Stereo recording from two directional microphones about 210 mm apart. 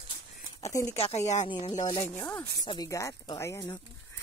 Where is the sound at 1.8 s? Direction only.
15° left (ahead or behind).